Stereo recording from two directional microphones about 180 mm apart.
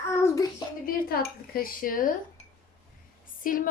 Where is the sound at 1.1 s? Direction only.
55° left (ahead or behind).